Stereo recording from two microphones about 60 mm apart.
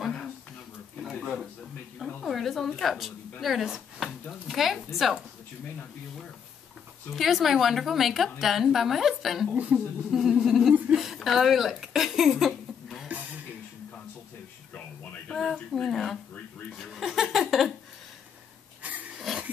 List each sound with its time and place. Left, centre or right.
1.2 s a sound: centre
2.2 s a woman's voice: centre
7.1 s a woman's voice: centre
9.5 s a woman's voice: right
10.1 s speech: centre
15.3 s a woman's voice: centre
16.7 s laughter: centre
18.8 s a sound: right
19.1 s a sound: centre